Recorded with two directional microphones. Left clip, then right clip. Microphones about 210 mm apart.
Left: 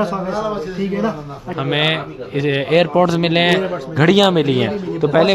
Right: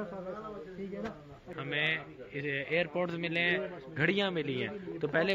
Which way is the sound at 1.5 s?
20° left (ahead or behind).